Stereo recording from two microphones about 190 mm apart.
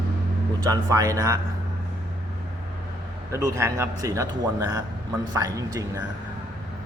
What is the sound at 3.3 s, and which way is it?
A man's voice, 15° right (ahead or behind).